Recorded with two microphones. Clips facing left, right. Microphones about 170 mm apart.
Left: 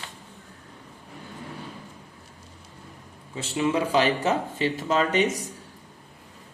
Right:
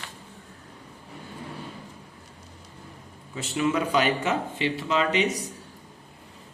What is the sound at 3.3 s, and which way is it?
Speech, 25° left (ahead or behind).